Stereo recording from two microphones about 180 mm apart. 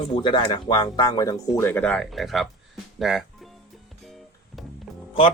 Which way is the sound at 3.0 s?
Centre (ahead or behind).